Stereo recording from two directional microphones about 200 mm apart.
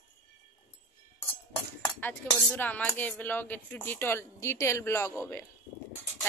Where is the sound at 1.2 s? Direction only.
10° left (ahead or behind).